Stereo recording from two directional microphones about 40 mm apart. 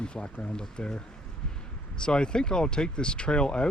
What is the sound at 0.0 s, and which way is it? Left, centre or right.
Speech, left.